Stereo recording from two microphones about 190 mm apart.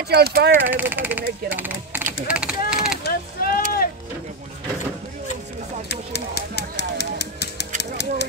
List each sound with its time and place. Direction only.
0.1 s speech: 55° right (ahead or behind)
0.7 s speech: 10° right (ahead or behind)
1.5 s typing: 10° right (ahead or behind)
2.2 s speech: 5° right (ahead or behind)
3.0 s chop: 50° left (ahead or behind)
5.9 s a sound: 60° left (ahead or behind)